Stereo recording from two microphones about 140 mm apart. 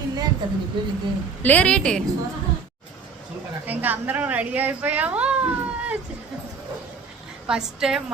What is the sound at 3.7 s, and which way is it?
Speech, 15° right (ahead or behind).